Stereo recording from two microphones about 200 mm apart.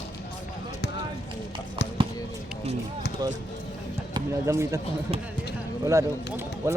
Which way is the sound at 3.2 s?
20° right (ahead or behind).